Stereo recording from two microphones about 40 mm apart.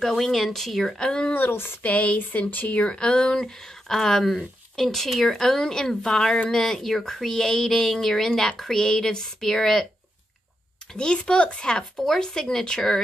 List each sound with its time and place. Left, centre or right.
0.0 s speech: centre
0.9 s speech: left
1.3 s speech: left
1.8 s speech: left
2.8 s speech: left
10.9 s speech: left